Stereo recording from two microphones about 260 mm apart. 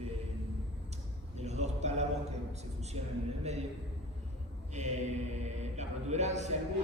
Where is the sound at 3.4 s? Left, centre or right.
Right.